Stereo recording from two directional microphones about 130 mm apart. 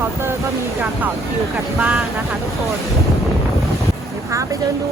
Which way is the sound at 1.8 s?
5° right (ahead or behind).